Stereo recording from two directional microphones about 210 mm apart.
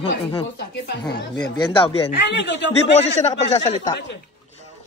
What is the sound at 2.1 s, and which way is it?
Speech, 55° left (ahead or behind).